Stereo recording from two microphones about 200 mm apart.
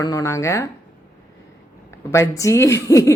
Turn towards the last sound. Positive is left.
turn(degrees=15)  # may be behind; listen again after turning